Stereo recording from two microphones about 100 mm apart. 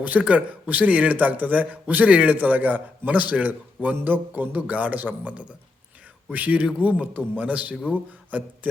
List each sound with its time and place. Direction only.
0.0 s speech: 15° right (ahead or behind)